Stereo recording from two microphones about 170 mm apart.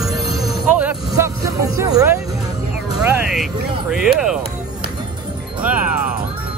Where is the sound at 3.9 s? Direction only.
5° right (ahead or behind).